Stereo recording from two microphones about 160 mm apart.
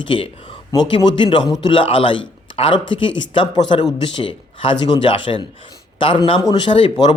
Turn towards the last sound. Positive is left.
turn(degrees=30)  # may be behind; listen again after turning